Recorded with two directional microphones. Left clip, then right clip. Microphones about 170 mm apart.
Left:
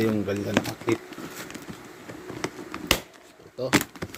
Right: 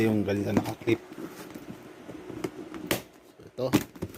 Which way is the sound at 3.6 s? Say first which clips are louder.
Left 3 dB; 5° right (ahead or behind).